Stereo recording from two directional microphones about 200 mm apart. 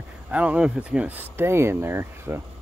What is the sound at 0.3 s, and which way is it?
Speech, 5° right (ahead or behind).